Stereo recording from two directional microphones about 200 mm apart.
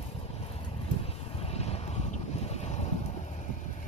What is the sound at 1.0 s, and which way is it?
Boat, 30° left (ahead or behind).